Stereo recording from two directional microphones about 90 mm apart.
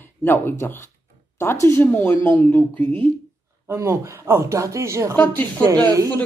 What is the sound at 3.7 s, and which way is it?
Speech, 30° right (ahead or behind).